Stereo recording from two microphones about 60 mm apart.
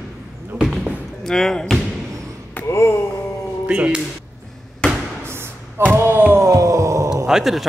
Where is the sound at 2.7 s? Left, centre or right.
Left.